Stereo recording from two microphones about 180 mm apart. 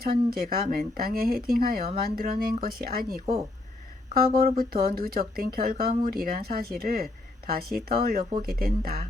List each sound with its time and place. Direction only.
0.0 s speech: 55° right (ahead or behind)